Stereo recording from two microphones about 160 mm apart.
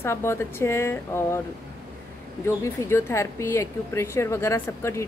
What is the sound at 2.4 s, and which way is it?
A woman's voice, 15° left (ahead or behind).